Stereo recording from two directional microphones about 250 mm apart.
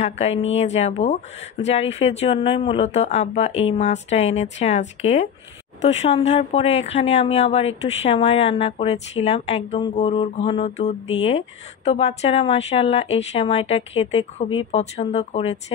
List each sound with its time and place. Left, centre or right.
0.0 s a woman's voice: left